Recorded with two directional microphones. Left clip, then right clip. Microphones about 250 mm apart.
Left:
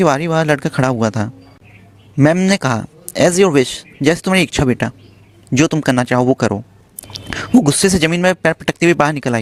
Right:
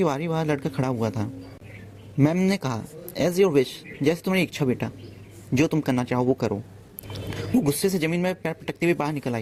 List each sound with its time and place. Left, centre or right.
0.0 s a man's voice: left
7.6 s a man's voice: left